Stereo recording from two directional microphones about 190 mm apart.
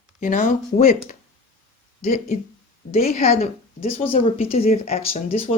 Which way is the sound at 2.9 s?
35° left (ahead or behind).